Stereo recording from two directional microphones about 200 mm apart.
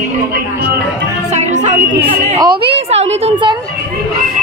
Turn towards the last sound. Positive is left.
turn(degrees=-30)  # may be behind; listen again after turning